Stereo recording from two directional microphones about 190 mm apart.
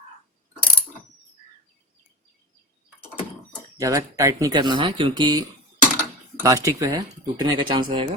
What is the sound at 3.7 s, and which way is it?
Speech, 15° right (ahead or behind).